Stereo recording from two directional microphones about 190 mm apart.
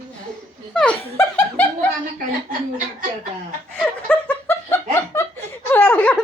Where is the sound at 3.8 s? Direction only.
10° left (ahead or behind).